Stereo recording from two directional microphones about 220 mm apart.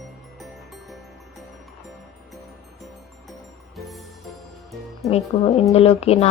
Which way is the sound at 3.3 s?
Centre (ahead or behind).